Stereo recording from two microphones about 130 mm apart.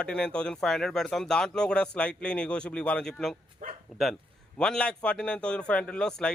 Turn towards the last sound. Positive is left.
turn(degrees=5)  # may be behind; listen again after turning